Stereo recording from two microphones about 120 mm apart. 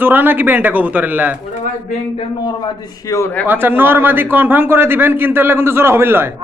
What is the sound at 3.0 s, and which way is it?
Speech, 25° left (ahead or behind).